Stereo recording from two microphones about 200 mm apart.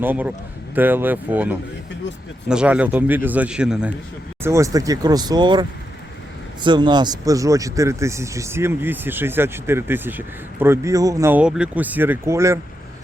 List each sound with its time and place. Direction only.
0.0 s speech: 10° right (ahead or behind)
4.4 s speech: 15° right (ahead or behind)